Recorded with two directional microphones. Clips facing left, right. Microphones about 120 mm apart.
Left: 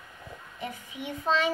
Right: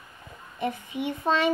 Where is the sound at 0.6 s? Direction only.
60° right (ahead or behind).